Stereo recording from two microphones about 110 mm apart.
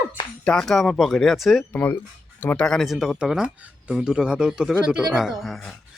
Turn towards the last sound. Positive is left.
turn(degrees=0)  # may be behind; listen again after turning